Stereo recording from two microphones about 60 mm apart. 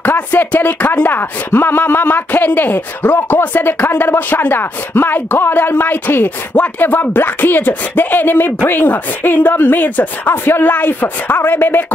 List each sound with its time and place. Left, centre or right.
0.0 s speech: left